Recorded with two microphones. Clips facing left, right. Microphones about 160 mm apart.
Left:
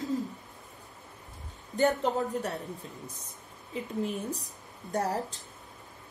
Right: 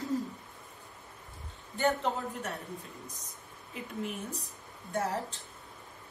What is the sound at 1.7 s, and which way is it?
A woman's voice, 40° left (ahead or behind).